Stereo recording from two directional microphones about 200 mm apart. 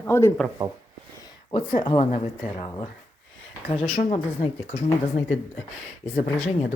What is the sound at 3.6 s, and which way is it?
Speech, 35° left (ahead or behind).